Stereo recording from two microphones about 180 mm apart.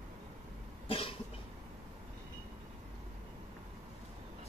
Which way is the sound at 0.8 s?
30° left (ahead or behind).